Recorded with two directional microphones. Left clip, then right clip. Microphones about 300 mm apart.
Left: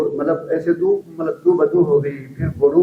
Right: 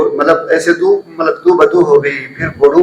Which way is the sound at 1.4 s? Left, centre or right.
Centre.